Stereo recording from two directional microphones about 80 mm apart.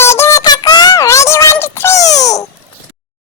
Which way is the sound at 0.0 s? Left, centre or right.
Left.